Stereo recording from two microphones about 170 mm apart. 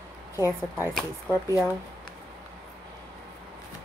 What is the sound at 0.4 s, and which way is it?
Speech, 15° right (ahead or behind).